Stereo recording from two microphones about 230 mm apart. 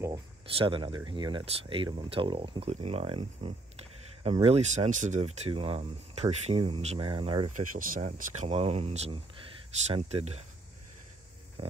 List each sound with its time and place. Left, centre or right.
0.0 s speech: right